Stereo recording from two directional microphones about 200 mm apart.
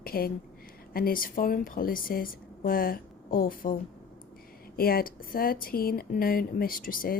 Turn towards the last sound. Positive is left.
turn(degrees=45)  # may be behind; listen again after turning